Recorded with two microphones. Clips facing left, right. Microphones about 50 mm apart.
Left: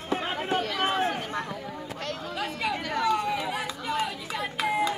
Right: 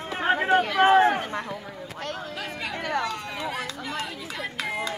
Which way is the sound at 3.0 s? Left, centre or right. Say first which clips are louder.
Left 6 dB; centre.